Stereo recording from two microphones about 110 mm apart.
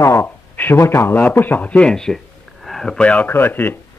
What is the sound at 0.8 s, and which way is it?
Speech, 25° left (ahead or behind).